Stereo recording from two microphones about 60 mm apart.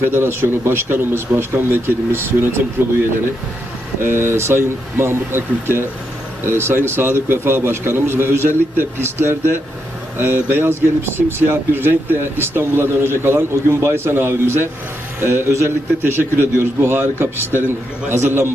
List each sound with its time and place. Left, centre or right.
0.0 s speech: right
4.0 s speech: right